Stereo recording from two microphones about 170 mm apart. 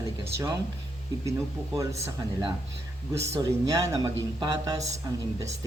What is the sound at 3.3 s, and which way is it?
Speech, 20° right (ahead or behind).